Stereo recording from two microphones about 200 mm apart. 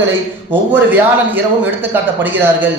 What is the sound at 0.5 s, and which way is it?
A man's voice, 10° right (ahead or behind).